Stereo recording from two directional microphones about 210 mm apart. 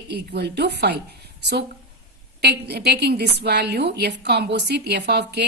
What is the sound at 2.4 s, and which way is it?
A woman's voice, 50° right (ahead or behind).